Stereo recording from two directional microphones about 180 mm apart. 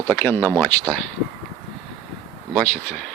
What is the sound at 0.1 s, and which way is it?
Speech, 10° left (ahead or behind).